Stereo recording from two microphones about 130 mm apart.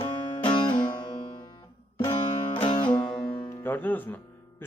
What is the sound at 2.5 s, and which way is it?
Music, 40° left (ahead or behind).